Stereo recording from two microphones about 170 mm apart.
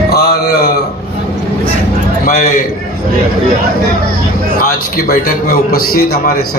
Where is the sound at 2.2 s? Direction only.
60° left (ahead or behind).